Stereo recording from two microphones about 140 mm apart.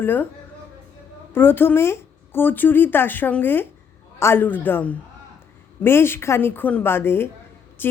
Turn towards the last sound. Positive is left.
turn(degrees=15)  # may be behind; listen again after turning